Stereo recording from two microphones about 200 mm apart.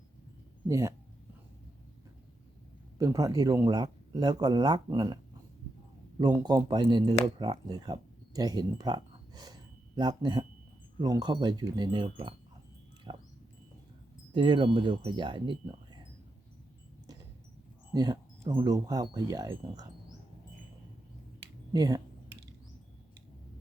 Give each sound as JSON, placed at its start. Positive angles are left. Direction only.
{"t": 0.7, "sound": "speech", "side_deg": -15}
{"t": 3.0, "sound": "speech", "side_deg": -15}
{"t": 6.1, "sound": "speech", "side_deg": -20}
{"t": 13.1, "sound": "a sound", "side_deg": -25}
{"t": 14.3, "sound": "speech", "side_deg": -25}
{"t": 17.9, "sound": "speech", "side_deg": -20}
{"t": 21.7, "sound": "speech", "side_deg": -20}